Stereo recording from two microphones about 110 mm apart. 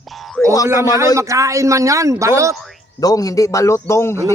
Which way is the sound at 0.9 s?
30° right (ahead or behind).